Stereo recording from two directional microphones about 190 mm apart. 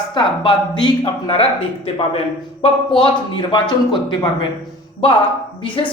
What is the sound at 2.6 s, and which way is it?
Speech, 25° left (ahead or behind).